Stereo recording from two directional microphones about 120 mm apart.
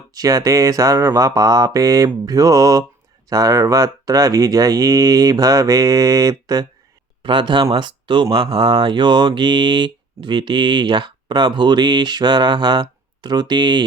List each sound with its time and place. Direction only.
0.1 s speech: 30° right (ahead or behind)
7.2 s speech: 40° right (ahead or behind)